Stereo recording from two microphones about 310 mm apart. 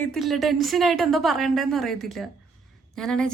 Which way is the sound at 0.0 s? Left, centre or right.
Centre.